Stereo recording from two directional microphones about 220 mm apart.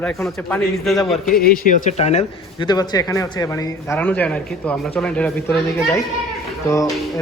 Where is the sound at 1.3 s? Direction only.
40° left (ahead or behind).